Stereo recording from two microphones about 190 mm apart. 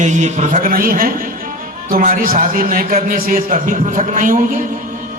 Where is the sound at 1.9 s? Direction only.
50° right (ahead or behind).